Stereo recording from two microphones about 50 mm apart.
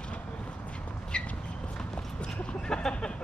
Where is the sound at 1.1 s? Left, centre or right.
Left.